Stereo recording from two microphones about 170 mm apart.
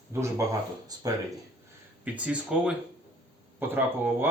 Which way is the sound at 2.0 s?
5° right (ahead or behind).